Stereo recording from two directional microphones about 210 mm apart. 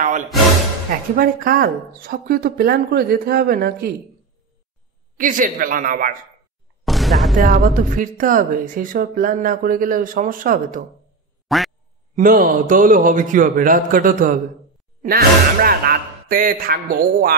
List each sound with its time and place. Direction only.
1.1 s speech: 45° right (ahead or behind)
5.1 s speech: 40° right (ahead or behind)
6.8 s music: centre (ahead or behind)
7.3 s speech: 40° right (ahead or behind)
11.4 s quack: centre (ahead or behind)
12.2 s speech: 40° right (ahead or behind)